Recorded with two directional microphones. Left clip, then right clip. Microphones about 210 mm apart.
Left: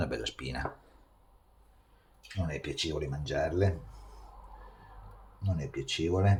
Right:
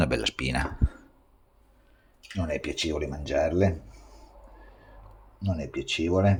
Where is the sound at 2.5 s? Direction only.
45° right (ahead or behind).